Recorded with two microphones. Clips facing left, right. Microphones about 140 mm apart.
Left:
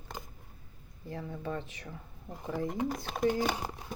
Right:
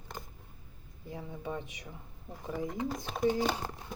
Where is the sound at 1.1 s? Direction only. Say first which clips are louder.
Left 2 dB; 15° right (ahead or behind).